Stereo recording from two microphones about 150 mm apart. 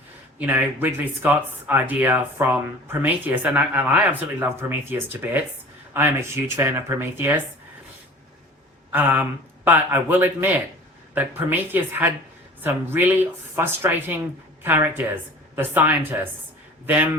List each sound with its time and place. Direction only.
0.3 s speech: 10° right (ahead or behind)
8.9 s a woman's voice: 15° right (ahead or behind)